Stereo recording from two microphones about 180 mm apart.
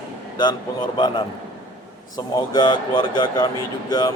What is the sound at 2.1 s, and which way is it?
Speech, 25° left (ahead or behind).